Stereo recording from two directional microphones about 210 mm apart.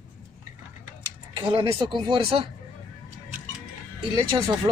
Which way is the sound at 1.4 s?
25° right (ahead or behind).